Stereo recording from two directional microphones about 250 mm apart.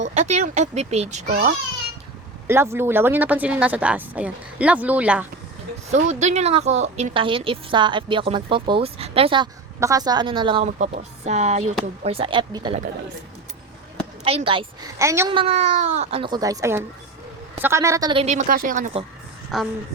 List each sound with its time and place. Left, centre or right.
0.0 s a woman's voice: right
2.5 s speech: centre
5.9 s a woman's voice: right
14.3 s a woman's voice: right
15.3 s a woman's voice: right
19.5 s speech: centre